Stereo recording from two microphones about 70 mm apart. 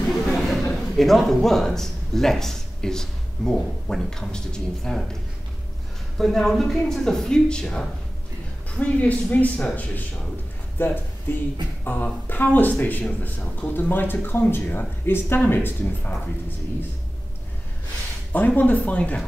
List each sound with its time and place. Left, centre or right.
0.1 s a man's voice: centre
6.1 s speech: centre; by 16.1 s left
18.3 s speech: left